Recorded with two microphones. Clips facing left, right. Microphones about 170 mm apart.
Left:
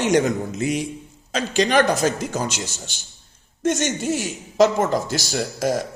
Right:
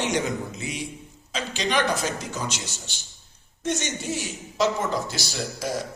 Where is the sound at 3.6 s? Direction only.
50° left (ahead or behind).